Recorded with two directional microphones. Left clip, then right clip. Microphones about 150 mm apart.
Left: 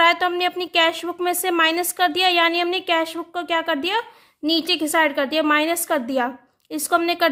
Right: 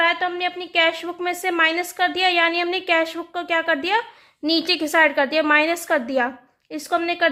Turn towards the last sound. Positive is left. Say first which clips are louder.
# left 1 dB
turn(degrees=30)  # may be behind; listen again after turning